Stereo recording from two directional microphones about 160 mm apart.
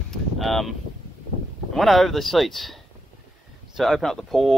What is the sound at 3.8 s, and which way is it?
Speech, centre (ahead or behind).